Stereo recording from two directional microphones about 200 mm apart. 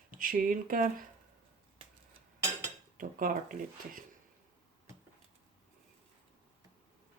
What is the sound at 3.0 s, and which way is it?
Speech, 45° right (ahead or behind).